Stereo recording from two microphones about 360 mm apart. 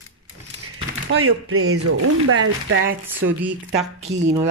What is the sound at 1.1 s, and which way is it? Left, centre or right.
Speech, right.